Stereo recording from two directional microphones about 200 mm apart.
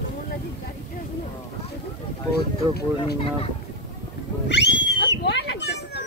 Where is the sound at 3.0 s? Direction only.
25° left (ahead or behind).